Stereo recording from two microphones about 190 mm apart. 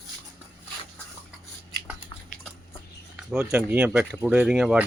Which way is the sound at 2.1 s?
25° left (ahead or behind).